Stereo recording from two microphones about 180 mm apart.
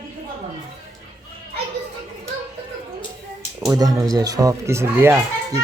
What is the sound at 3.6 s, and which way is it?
A man's voice, 20° right (ahead or behind).